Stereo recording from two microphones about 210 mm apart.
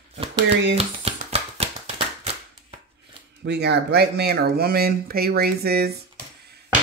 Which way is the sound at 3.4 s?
55° right (ahead or behind).